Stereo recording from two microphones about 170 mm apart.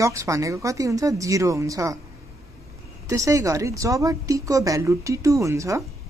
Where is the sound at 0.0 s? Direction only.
20° right (ahead or behind).